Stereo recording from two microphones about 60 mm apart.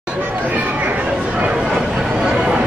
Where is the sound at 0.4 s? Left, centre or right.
Right.